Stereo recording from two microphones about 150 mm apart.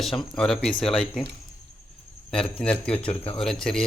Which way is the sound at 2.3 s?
5° left (ahead or behind).